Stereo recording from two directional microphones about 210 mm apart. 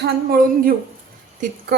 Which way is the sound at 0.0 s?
45° right (ahead or behind).